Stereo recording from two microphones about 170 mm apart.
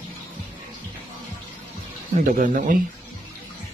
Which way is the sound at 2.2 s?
50° right (ahead or behind).